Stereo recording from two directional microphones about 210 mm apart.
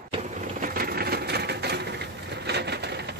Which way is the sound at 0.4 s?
40° right (ahead or behind).